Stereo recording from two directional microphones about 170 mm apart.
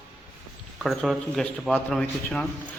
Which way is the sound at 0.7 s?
Centre (ahead or behind).